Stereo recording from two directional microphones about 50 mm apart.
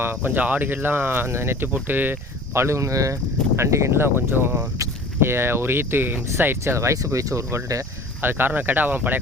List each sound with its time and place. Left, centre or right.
0.0 s speech: right
1.7 s speech: right
2.5 s speech: right
3.5 s speech: right
6.7 s speech: right
8.2 s speech: right